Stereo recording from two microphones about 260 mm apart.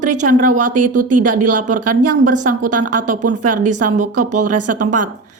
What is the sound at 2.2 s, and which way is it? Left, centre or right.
A woman's voice, right.